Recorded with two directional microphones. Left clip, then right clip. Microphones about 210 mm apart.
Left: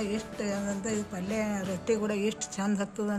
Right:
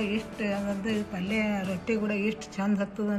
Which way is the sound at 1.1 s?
40° left (ahead or behind).